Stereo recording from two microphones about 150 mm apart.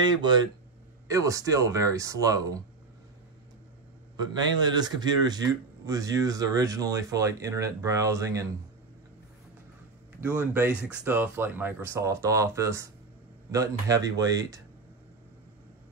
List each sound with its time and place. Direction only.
0.0 s speech: 30° right (ahead or behind)
4.2 s speech: 25° right (ahead or behind)
10.2 s speech: 15° right (ahead or behind)